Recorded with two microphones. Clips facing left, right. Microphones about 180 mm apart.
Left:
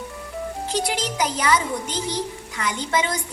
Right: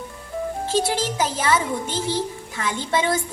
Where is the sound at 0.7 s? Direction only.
15° left (ahead or behind).